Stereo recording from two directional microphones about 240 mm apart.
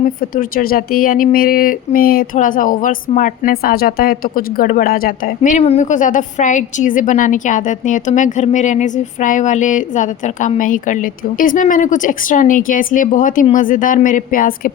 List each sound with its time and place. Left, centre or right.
0.0 s speech: left